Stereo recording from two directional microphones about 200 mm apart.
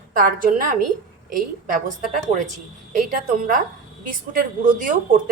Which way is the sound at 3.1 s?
40° right (ahead or behind).